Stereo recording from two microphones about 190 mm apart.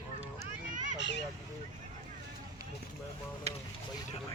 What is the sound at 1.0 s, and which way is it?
Speech, 65° left (ahead or behind).